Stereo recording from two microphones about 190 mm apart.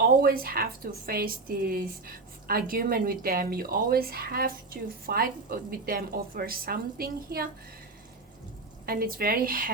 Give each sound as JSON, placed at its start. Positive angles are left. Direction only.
{"t": 0.2, "sound": "a woman's voice", "side_deg": -50}
{"t": 8.9, "sound": "a woman's voice", "side_deg": -50}